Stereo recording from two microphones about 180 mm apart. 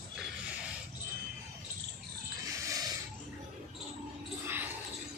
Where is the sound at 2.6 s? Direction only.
20° right (ahead or behind).